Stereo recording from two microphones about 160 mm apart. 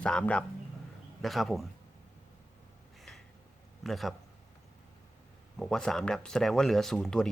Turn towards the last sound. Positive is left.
turn(degrees=5)  # may be behind; listen again after turning